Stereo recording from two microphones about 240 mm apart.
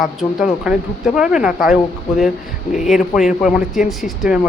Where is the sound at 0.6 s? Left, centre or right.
Centre.